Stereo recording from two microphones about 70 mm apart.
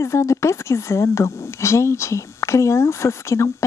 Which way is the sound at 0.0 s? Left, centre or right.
Left.